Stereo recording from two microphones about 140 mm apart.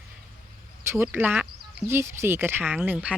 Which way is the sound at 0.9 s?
15° right (ahead or behind).